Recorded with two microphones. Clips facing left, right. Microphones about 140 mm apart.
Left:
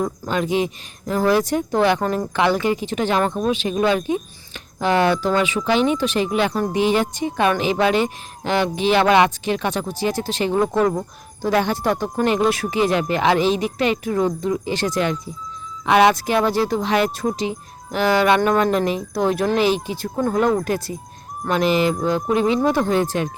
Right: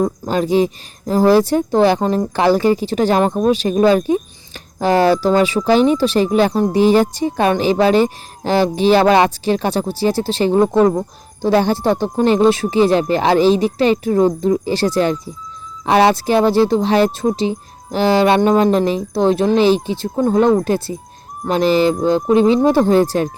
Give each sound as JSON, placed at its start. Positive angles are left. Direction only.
{"t": 0.0, "sound": "speech", "side_deg": -35}